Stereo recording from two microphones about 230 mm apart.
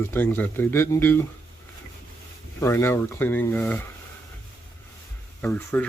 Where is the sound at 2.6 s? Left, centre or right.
Centre.